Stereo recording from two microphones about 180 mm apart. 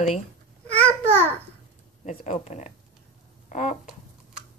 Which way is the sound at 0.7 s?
10° left (ahead or behind).